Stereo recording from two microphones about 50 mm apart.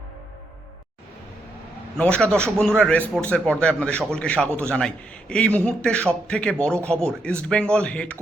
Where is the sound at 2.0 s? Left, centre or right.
Left.